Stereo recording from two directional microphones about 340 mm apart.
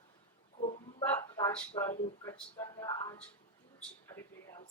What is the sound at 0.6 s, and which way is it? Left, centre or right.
Hiccup, centre.